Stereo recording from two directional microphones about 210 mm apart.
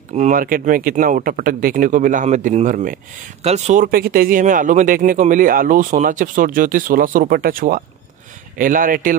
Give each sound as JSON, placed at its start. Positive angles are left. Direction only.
{"t": 0.1, "sound": "speech", "side_deg": -35}